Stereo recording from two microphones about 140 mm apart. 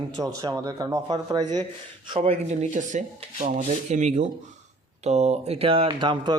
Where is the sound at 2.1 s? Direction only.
50° right (ahead or behind).